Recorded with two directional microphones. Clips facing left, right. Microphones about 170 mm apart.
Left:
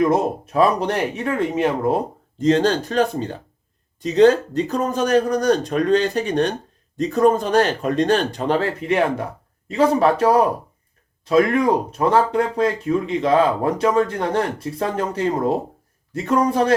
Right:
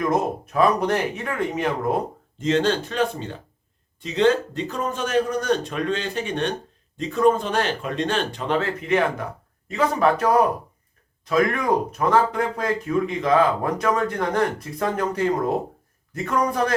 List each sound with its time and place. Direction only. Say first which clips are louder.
0.0 s speech: left 4 dB; 30° left (ahead or behind)